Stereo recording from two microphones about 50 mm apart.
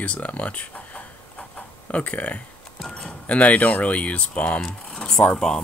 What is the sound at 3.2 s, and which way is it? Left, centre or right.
Speech, left.